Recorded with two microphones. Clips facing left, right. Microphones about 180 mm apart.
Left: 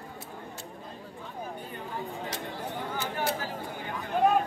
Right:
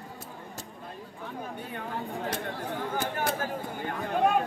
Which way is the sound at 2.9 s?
50° right (ahead or behind).